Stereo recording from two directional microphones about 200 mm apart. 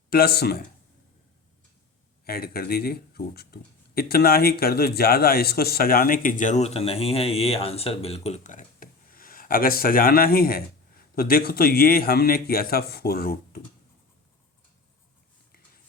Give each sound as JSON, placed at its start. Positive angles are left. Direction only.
{"t": 0.1, "sound": "speech", "side_deg": 50}
{"t": 2.2, "sound": "speech", "side_deg": 50}